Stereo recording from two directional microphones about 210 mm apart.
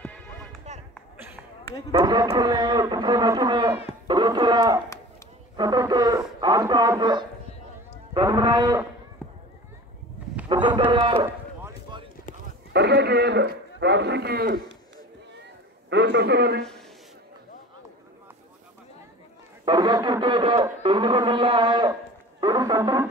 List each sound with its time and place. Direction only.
0.0 s music: 5° left (ahead or behind)
1.9 s a man's voice: 20° right (ahead or behind)
4.1 s a sound: 20° right (ahead or behind)
5.6 s speech: 20° right (ahead or behind)
8.1 s cattle: 20° right (ahead or behind)
9.2 s run: 5° left (ahead or behind)
10.5 s speech: 20° right (ahead or behind)
11.2 s run: 10° right (ahead or behind)
12.7 s a man's voice: 55° right (ahead or behind)
15.9 s a man's voice: 55° right (ahead or behind)
19.6 s speech: 20° right (ahead or behind)